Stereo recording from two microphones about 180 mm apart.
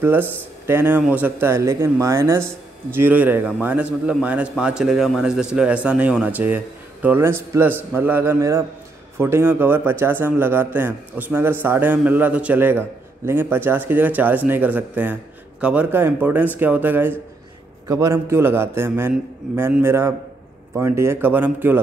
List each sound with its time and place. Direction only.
0.0 s speech: 10° right (ahead or behind)